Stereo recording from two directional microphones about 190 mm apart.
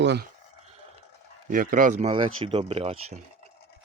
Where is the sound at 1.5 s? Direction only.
45° right (ahead or behind); by 3.2 s 30° right (ahead or behind).